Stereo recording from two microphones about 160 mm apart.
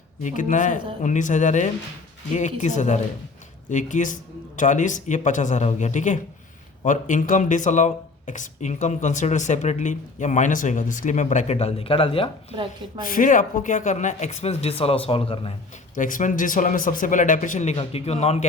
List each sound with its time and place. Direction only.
0.2 s speech: 55° left (ahead or behind); by 12.5 s 35° left (ahead or behind)
13.1 s speech: 55° left (ahead or behind); by 15.5 s 35° left (ahead or behind)
16.0 s speech: 55° left (ahead or behind)